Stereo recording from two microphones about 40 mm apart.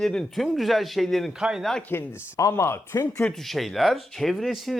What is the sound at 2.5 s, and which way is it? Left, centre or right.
Speech, left.